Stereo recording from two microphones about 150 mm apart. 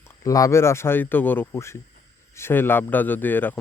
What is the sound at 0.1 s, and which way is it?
A man's voice, 20° left (ahead or behind).